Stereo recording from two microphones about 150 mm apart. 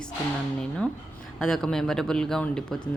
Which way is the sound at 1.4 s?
5° left (ahead or behind).